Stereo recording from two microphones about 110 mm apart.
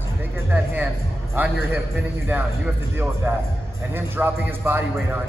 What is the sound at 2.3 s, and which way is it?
A man's voice, 15° right (ahead or behind).